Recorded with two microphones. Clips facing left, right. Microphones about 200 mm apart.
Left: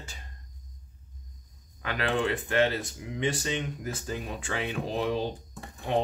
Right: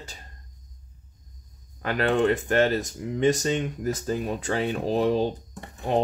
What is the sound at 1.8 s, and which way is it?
Speech, 40° right (ahead or behind).